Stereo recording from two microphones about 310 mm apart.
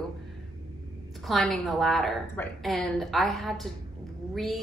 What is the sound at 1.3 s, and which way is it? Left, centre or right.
Speech, centre.